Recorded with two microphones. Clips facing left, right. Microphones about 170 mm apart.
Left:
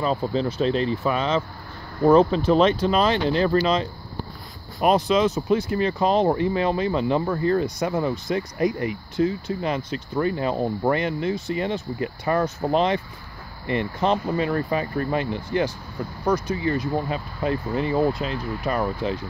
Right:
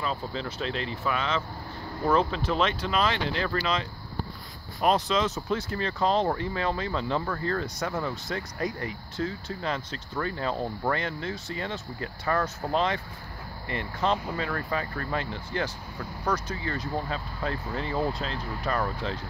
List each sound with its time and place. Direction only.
0.0 s speech: 40° left (ahead or behind)
4.8 s speech: 10° left (ahead or behind)